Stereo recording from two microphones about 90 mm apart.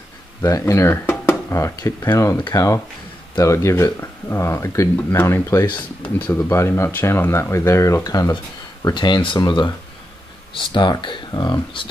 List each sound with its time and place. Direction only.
0.4 s speech: 35° left (ahead or behind)
6.0 s speech: 20° left (ahead or behind); by 8.4 s 45° left (ahead or behind)
8.8 s speech: 55° left (ahead or behind)
11.3 s speech: 45° left (ahead or behind)